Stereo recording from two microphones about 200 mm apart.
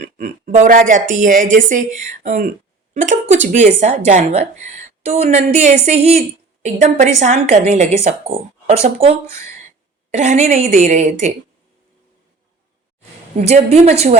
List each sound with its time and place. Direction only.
0.0 s a woman's voice: 35° right (ahead or behind)
13.3 s a woman's voice: 35° right (ahead or behind)